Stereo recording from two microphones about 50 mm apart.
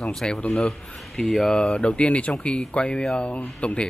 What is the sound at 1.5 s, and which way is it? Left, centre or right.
Speech, left.